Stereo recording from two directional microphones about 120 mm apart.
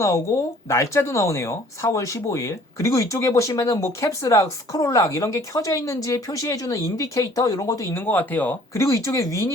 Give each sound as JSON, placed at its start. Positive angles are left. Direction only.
{"t": 0.7, "sound": "speech", "side_deg": 20}
{"t": 7.9, "sound": "speech", "side_deg": 15}
{"t": 8.8, "sound": "speech", "side_deg": 25}